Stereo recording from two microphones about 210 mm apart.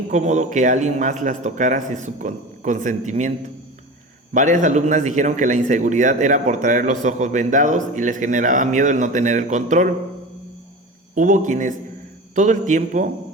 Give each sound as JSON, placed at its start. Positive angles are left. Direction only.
{"t": 0.1, "sound": "a man's voice", "side_deg": -35}
{"t": 4.4, "sound": "a man's voice", "side_deg": -35}
{"t": 11.1, "sound": "a man's voice", "side_deg": -35}